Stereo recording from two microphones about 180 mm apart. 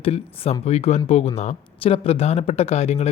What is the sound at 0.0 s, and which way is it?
A man's voice, 35° left (ahead or behind).